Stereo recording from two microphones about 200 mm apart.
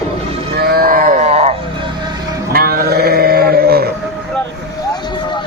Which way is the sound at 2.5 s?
50° right (ahead or behind).